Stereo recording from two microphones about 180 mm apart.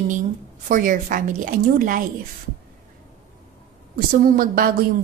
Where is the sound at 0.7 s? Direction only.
45° right (ahead or behind).